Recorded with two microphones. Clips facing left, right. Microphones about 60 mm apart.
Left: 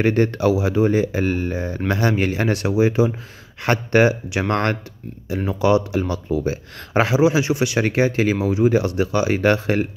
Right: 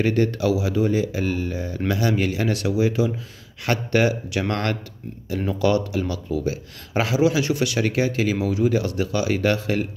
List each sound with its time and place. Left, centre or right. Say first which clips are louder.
0.0 s speech: left 3 dB; left
5.5 s speech: left 3 dB; left